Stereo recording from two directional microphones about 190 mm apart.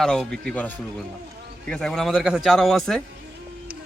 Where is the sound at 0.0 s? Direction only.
5° left (ahead or behind).